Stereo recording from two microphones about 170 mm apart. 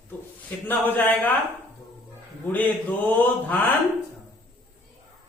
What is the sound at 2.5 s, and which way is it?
A man's voice, 10° left (ahead or behind).